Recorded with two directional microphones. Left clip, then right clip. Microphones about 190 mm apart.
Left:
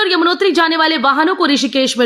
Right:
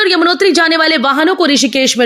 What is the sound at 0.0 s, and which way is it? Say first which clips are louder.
A woman's voice: right 3 dB; 10° right (ahead or behind).